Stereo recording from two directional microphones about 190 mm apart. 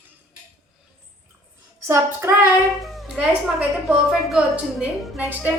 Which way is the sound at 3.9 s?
Centre (ahead or behind).